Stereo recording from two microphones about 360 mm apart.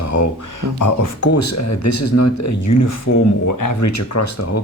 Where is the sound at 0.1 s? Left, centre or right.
Left.